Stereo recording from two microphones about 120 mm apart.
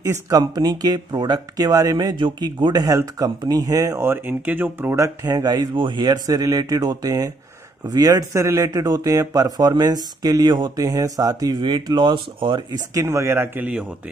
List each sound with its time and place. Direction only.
0.0 s speech: 30° right (ahead or behind)
12.9 s speech: 20° right (ahead or behind)